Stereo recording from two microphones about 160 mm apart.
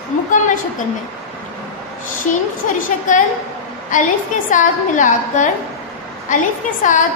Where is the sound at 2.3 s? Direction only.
55° left (ahead or behind).